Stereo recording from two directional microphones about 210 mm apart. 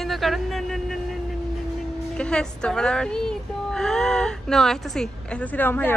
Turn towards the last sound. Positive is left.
turn(degrees=10)  # may be behind; listen again after turning